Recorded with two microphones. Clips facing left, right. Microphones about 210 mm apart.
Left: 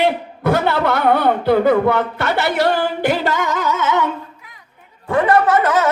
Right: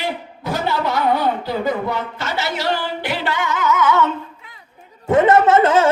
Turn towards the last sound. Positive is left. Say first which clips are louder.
# right 2 dB
turn(degrees=-25)  # may be behind; listen again after turning